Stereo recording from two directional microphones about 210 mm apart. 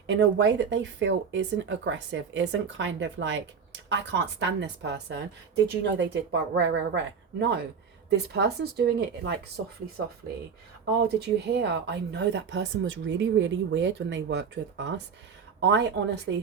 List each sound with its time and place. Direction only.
0.1 s speech: 60° right (ahead or behind)
11.2 s speech: 55° right (ahead or behind)